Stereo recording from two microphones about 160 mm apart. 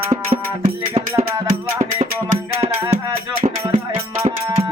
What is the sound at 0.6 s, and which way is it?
Music, 35° right (ahead or behind).